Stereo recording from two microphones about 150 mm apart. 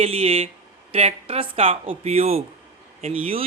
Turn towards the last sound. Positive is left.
turn(degrees=-40)  # may be behind; listen again after turning